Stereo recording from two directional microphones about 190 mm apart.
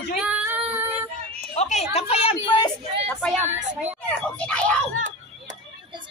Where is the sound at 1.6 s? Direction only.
35° left (ahead or behind).